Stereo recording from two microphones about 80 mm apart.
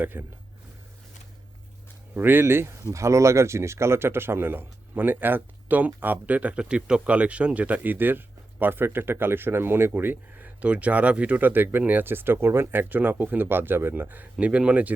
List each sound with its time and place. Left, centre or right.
0.0 s speech: right
2.1 s speech: right